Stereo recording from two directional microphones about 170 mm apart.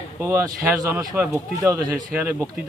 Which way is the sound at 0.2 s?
15° right (ahead or behind).